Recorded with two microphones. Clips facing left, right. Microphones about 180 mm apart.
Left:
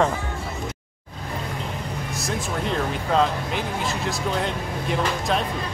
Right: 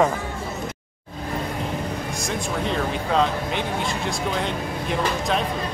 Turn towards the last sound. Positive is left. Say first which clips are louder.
# even
turn(degrees=0)  # may be behind; listen again after turning